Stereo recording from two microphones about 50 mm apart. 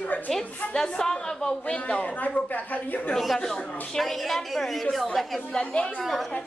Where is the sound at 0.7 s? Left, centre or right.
Centre; by 3.0 s left.